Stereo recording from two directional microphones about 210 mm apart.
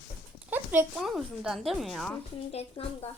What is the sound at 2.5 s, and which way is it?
Speech, 30° left (ahead or behind).